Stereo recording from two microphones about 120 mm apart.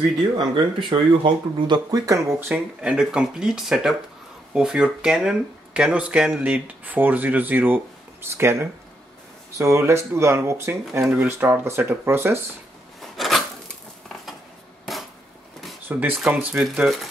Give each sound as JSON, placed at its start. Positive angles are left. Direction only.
{"t": 0.4, "sound": "speech", "side_deg": -45}
{"t": 2.5, "sound": "speech", "side_deg": -10}
{"t": 13.0, "sound": "a sound", "side_deg": 0}
{"t": 15.9, "sound": "speech", "side_deg": -15}
{"t": 16.5, "sound": "speech", "side_deg": -5}